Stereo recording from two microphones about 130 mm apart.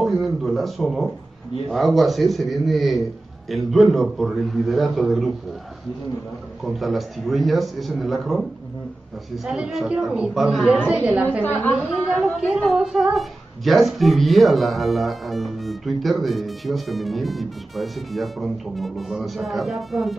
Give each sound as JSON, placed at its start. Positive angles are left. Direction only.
{"t": 0.0, "sound": "speech", "side_deg": 0}
{"t": 6.6, "sound": "a woman's voice", "side_deg": 0}